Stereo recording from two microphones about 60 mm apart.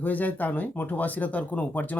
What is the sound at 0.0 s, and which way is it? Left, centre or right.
Speech, left.